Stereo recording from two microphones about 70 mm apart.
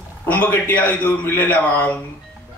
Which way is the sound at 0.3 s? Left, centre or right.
Left.